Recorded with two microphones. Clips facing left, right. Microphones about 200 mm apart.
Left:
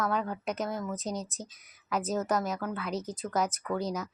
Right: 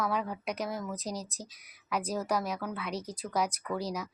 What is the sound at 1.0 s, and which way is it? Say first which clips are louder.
Speech: left 2 dB; 35° right (ahead or behind).